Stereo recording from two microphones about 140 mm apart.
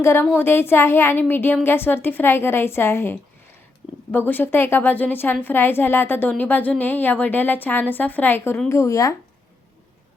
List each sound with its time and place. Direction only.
0.0 s a woman's voice: 15° left (ahead or behind)
4.3 s a woman's voice: 15° left (ahead or behind)